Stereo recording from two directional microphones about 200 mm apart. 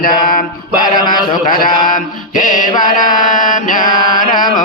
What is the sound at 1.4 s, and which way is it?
Mantra, 45° left (ahead or behind).